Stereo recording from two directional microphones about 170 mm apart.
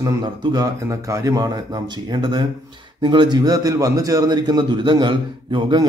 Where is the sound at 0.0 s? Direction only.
25° right (ahead or behind).